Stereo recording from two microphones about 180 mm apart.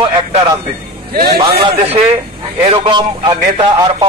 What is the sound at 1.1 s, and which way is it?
Speech, 60° right (ahead or behind).